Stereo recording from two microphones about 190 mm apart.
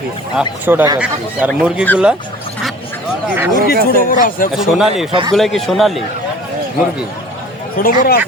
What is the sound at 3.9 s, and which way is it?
Speech, 45° left (ahead or behind).